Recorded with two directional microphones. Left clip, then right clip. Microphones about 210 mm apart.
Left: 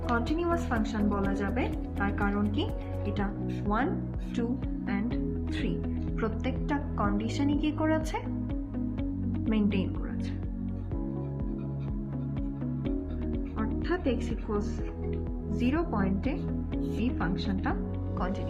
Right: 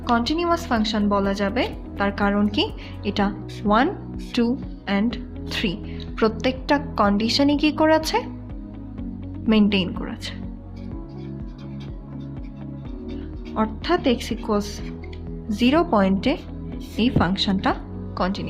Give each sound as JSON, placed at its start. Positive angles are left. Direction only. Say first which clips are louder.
{"t": 0.1, "sound": "a woman's voice", "louder": "right 9 dB", "side_deg": -40}
{"t": 4.4, "sound": "a woman's voice", "louder": "right 9 dB", "side_deg": -45}
{"t": 9.5, "sound": "a woman's voice", "louder": "right 11 dB", "side_deg": -45}
{"t": 13.6, "sound": "a woman's voice", "louder": "right 11 dB", "side_deg": -45}